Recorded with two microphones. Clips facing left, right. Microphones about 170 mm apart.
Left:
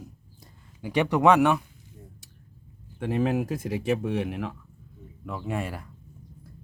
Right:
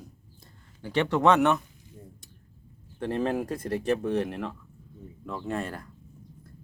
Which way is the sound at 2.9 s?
5° left (ahead or behind).